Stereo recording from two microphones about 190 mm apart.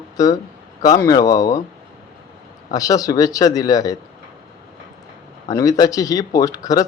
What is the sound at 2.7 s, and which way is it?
Speech, 20° left (ahead or behind).